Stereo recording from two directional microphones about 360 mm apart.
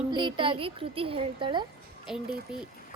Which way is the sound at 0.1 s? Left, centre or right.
Centre.